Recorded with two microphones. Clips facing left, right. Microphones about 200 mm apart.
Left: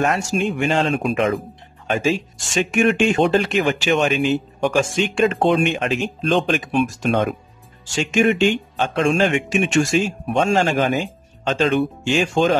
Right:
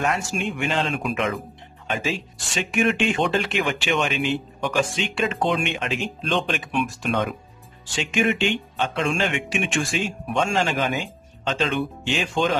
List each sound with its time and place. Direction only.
0.0 s speech: 40° left (ahead or behind)
1.9 s speech: 45° left (ahead or behind)